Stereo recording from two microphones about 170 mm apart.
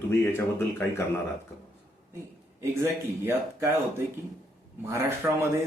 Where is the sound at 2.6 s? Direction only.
15° right (ahead or behind).